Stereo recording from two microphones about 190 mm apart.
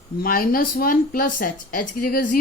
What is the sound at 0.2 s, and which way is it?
Speech, 50° left (ahead or behind).